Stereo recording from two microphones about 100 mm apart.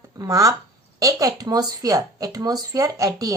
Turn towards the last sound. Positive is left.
turn(degrees=-35)  # may be behind; listen again after turning